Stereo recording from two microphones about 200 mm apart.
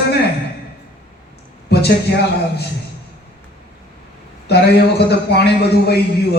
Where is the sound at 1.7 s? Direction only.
55° left (ahead or behind).